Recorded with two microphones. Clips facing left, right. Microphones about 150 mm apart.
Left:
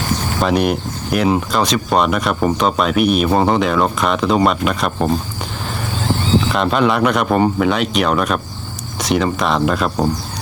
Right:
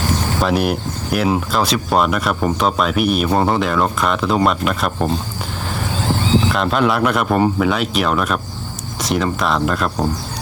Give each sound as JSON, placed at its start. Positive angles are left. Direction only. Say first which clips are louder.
{"t": 0.4, "sound": "speech", "louder": "left 3 dB", "side_deg": -5}
{"t": 6.5, "sound": "speech", "louder": "left 1 dB", "side_deg": 0}